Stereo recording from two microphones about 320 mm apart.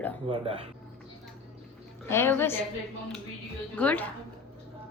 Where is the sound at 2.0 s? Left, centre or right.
Centre.